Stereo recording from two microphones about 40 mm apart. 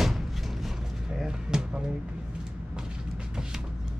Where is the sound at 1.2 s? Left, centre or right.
Centre.